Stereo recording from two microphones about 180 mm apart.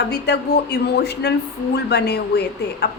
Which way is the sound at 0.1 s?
65° left (ahead or behind).